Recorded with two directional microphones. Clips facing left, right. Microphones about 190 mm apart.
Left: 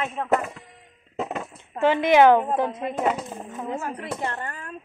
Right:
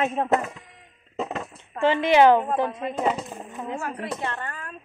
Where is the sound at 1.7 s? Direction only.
15° left (ahead or behind).